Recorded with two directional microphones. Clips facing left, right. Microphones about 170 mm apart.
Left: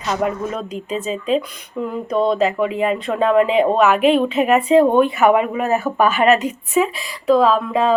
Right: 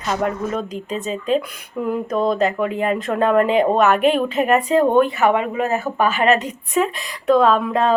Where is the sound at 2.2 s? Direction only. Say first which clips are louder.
Left 1 dB; centre (ahead or behind).